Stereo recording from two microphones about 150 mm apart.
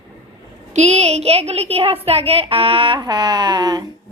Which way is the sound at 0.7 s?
50° right (ahead or behind).